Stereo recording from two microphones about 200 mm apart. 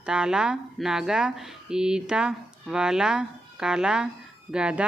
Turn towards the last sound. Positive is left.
turn(degrees=-5)  # may be behind; listen again after turning